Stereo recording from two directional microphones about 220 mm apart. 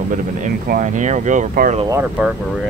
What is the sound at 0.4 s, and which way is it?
Speech, 35° right (ahead or behind).